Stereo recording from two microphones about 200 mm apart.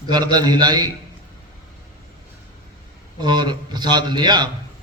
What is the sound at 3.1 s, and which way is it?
A man's voice, 20° right (ahead or behind).